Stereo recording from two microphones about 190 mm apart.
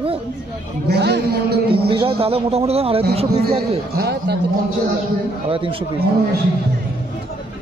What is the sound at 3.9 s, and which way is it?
Speech, 55° right (ahead or behind).